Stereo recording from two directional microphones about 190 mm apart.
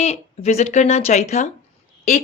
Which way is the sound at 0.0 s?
35° left (ahead or behind).